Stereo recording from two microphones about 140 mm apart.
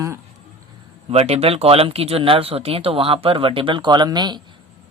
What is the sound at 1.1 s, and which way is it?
Speech, 45° right (ahead or behind).